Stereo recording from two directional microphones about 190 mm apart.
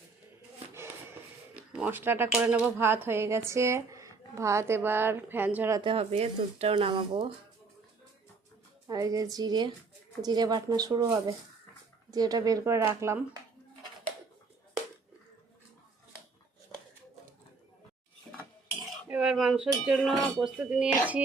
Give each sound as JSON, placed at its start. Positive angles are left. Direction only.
{"t": 1.8, "sound": "speech", "side_deg": -10}
{"t": 5.8, "sound": "speech", "side_deg": -30}
{"t": 8.9, "sound": "speech", "side_deg": -20}
{"t": 19.0, "sound": "speech", "side_deg": -5}